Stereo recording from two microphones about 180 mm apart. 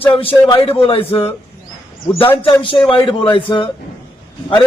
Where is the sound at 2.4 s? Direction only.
30° left (ahead or behind).